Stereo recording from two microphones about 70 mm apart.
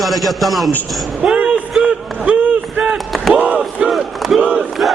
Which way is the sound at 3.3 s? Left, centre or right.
Centre.